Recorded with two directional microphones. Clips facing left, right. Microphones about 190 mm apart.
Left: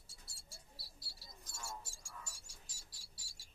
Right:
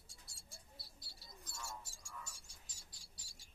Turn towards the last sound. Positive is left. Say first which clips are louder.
# even
turn(degrees=0)  # may be behind; listen again after turning